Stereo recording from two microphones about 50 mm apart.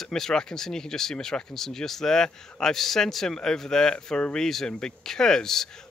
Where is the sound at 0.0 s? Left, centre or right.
Centre.